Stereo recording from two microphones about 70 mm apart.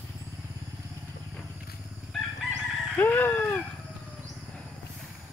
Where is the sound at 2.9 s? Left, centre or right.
Left.